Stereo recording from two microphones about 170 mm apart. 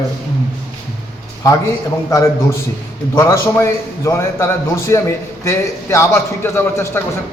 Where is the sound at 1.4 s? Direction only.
20° left (ahead or behind).